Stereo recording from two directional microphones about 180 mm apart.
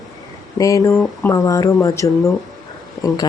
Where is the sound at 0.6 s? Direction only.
20° left (ahead or behind).